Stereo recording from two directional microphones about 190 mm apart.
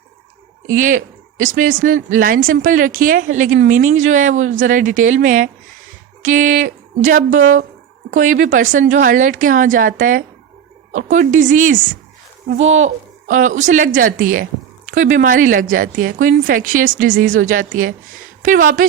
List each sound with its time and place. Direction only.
0.7 s a woman's voice: 45° right (ahead or behind)